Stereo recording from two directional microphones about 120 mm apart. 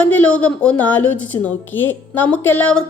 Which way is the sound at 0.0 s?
10° left (ahead or behind).